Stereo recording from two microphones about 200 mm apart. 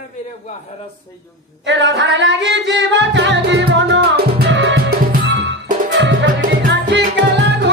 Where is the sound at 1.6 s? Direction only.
65° right (ahead or behind).